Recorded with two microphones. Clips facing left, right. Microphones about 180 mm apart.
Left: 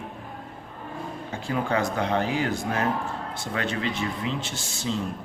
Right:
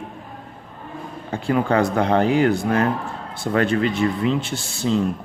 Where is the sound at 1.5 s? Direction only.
60° right (ahead or behind).